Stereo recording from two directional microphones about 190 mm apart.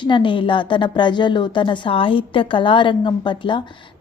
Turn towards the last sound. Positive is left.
turn(degrees=25)  # may be behind; listen again after turning